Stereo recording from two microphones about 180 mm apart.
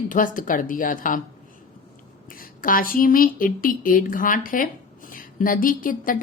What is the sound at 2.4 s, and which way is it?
A woman's voice, 50° left (ahead or behind).